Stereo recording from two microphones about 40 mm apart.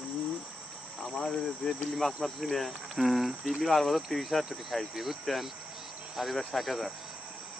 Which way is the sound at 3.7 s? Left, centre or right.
Centre.